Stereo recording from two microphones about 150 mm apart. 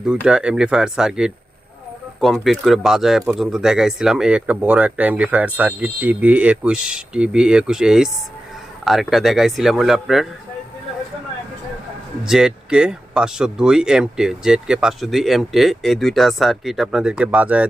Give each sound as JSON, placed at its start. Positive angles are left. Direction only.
{"t": 0.0, "sound": "speech", "side_deg": -5}
{"t": 12.2, "sound": "speech", "side_deg": -5}